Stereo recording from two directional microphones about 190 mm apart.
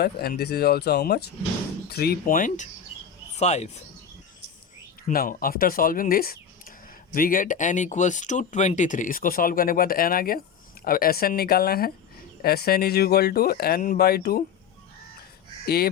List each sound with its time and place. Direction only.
0.0 s speech: 55° left (ahead or behind); by 3.7 s 35° left (ahead or behind)
5.0 s speech: 50° left (ahead or behind)
15.6 s speech: 55° left (ahead or behind)